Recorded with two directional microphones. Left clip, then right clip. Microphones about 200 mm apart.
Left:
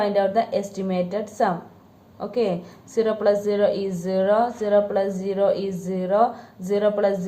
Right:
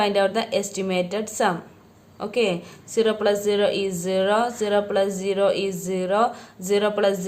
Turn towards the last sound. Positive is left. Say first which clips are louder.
# even
turn(degrees=-25)  # may be behind; listen again after turning